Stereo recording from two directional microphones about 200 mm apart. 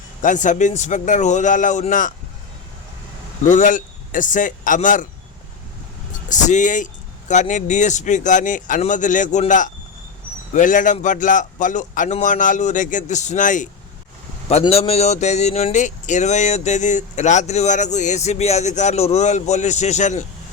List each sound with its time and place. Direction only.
0.2 s speech: 40° left (ahead or behind)
3.5 s a man's voice: 40° left (ahead or behind)
6.2 s speech: 35° left (ahead or behind)